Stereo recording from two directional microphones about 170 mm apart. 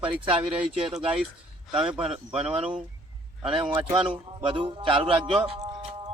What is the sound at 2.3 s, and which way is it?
A man's voice, 35° right (ahead or behind).